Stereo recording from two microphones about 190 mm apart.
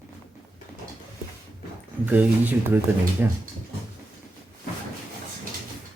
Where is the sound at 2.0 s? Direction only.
10° right (ahead or behind).